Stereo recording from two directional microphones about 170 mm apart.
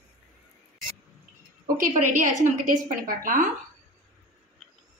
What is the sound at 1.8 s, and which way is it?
A woman's voice, 50° right (ahead or behind).